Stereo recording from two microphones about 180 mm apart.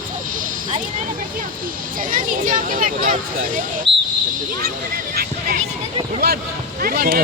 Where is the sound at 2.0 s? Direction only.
50° right (ahead or behind).